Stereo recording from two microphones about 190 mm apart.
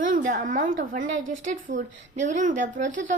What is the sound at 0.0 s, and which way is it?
A woman's voice, 45° right (ahead or behind).